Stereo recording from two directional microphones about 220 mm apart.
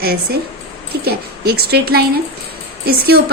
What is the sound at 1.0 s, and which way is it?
A woman's voice, 45° right (ahead or behind).